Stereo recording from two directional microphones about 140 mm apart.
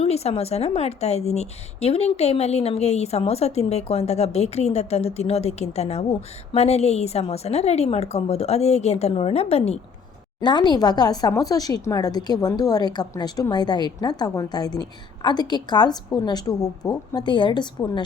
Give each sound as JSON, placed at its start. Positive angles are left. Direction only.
{"t": 0.0, "sound": "a woman's voice", "side_deg": 50}
{"t": 10.4, "sound": "speech", "side_deg": 30}